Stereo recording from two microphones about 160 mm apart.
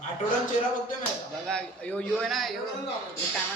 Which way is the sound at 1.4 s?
5° left (ahead or behind).